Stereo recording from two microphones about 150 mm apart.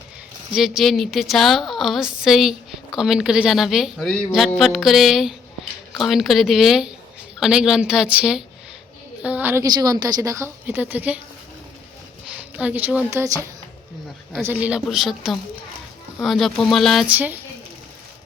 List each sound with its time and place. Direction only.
0.5 s a woman's voice: 5° right (ahead or behind)
9.2 s a sound: 10° right (ahead or behind)
9.6 s a woman's voice: 25° right (ahead or behind)
12.3 s speech: 5° right (ahead or behind)
13.1 s a woman's voice: 20° right (ahead or behind)
14.4 s a woman's voice: 10° right (ahead or behind)
17.1 s speech: 10° right (ahead or behind)